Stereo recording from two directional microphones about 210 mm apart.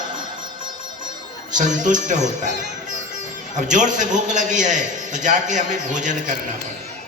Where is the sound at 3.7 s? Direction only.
35° right (ahead or behind).